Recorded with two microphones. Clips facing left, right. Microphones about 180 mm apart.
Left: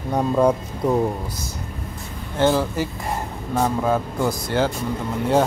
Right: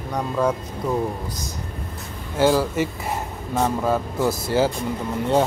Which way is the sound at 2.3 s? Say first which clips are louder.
Right 1 dB; 5° right (ahead or behind).